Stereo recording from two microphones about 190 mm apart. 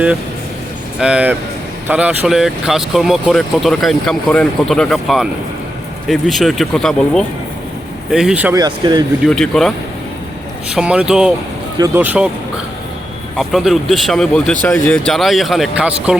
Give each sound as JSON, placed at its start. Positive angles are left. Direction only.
{"t": 0.9, "sound": "speech", "side_deg": -5}
{"t": 8.5, "sound": "speech", "side_deg": -20}
{"t": 9.2, "sound": "speech", "side_deg": 5}
{"t": 13.3, "sound": "speech", "side_deg": 0}